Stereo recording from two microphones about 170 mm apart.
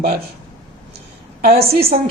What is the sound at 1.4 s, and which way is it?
Speech, 65° right (ahead or behind).